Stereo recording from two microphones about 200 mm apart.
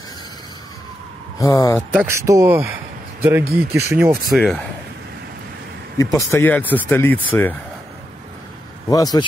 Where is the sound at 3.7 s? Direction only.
15° right (ahead or behind).